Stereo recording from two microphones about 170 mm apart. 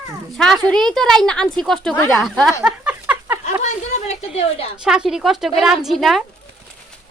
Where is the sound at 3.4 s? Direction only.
45° left (ahead or behind).